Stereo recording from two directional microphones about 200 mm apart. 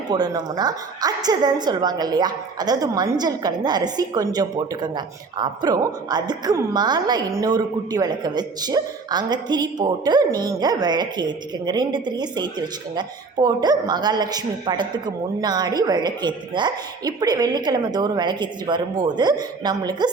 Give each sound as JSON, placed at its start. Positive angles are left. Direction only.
{"t": 0.1, "sound": "a woman's voice", "side_deg": -20}